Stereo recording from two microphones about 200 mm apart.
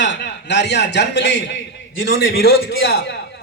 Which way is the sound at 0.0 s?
60° left (ahead or behind).